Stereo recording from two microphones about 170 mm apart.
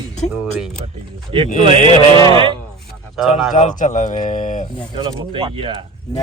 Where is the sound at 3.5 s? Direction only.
50° left (ahead or behind).